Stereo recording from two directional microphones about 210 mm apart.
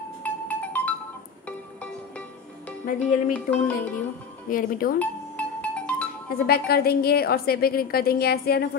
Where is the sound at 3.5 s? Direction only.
45° left (ahead or behind).